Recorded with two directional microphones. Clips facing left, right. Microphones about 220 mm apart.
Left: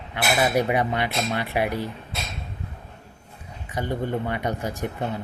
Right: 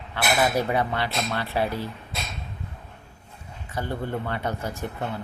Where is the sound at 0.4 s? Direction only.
15° left (ahead or behind).